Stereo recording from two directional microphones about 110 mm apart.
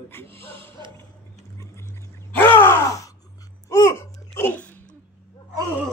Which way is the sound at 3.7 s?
20° left (ahead or behind).